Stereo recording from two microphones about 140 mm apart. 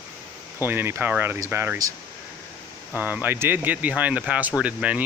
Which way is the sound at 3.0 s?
15° right (ahead or behind).